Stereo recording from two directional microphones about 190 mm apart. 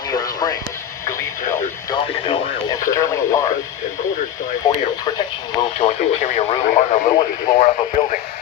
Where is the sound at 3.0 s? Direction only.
15° left (ahead or behind).